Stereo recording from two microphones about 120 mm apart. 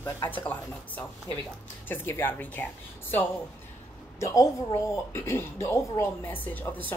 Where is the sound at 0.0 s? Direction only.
15° left (ahead or behind).